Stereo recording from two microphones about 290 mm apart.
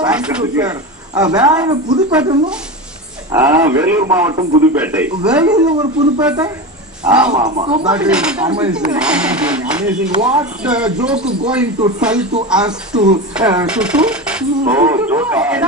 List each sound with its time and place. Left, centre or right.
0.0 s a man's voice: centre
7.9 s a man's voice: centre